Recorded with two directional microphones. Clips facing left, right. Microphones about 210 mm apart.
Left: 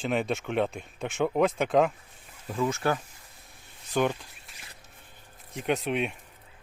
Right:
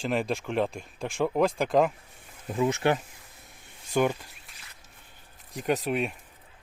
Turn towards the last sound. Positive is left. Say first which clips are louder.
# right 1 dB
turn(degrees=0)  # may be behind; listen again after turning